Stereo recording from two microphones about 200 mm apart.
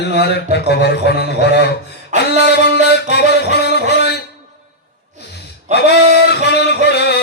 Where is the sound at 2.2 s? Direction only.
55° left (ahead or behind).